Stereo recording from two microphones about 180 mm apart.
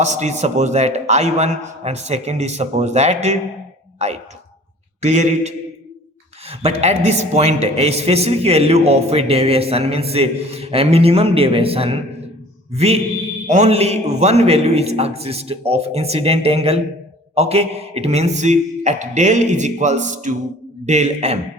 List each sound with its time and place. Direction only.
0.0 s a man's voice: 40° right (ahead or behind)
3.9 s a sound: 35° right (ahead or behind)
5.0 s a man's voice: 40° right (ahead or behind)